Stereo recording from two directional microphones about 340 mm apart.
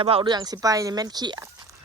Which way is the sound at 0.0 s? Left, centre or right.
Centre.